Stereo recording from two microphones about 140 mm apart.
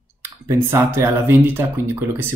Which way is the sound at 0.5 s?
20° right (ahead or behind).